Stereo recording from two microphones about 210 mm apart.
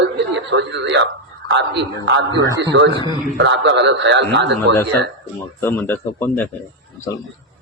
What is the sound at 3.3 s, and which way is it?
A man's voice, 60° right (ahead or behind).